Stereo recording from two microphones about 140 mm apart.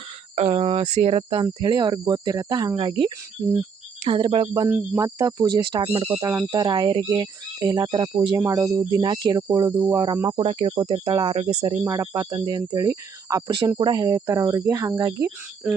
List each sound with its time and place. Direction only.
0.3 s speech: 45° right (ahead or behind)
1.5 s speech: 30° right (ahead or behind)
3.4 s speech: 20° right (ahead or behind)
4.1 s speech: 40° right (ahead or behind)
4.9 s speech: 25° right (ahead or behind)
5.8 s speech: 40° right (ahead or behind)
10.3 s speech: 40° right (ahead or behind)
11.9 s speech: 25° right (ahead or behind)